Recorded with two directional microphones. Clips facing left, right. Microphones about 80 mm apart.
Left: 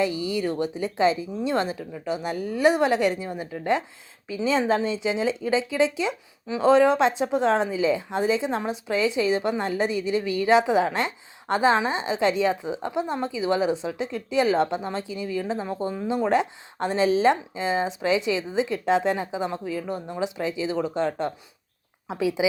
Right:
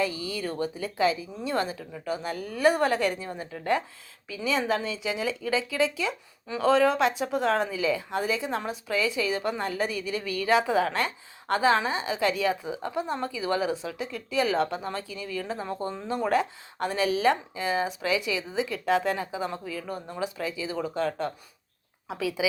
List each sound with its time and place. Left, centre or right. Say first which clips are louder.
0.0 s speech: left 5 dB; left